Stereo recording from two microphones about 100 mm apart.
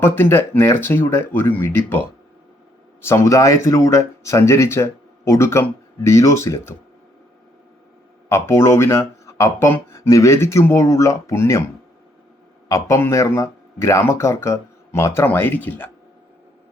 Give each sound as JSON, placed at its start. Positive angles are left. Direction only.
{"t": 0.0, "sound": "speech", "side_deg": 20}
{"t": 3.0, "sound": "speech", "side_deg": 25}
{"t": 8.3, "sound": "speech", "side_deg": 25}
{"t": 12.6, "sound": "speech", "side_deg": 35}